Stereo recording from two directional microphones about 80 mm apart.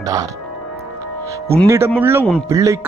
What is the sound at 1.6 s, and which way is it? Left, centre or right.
Speech, right.